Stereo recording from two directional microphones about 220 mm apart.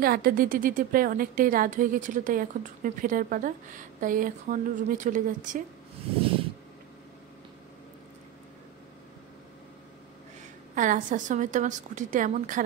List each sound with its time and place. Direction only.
0.0 s speech: 40° right (ahead or behind)
10.7 s speech: 35° right (ahead or behind)